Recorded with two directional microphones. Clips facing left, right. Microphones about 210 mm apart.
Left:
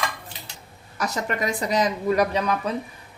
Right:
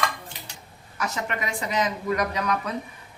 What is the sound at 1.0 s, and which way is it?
Speech, 35° left (ahead or behind).